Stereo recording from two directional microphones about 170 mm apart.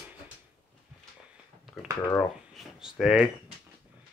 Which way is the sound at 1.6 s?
Centre (ahead or behind).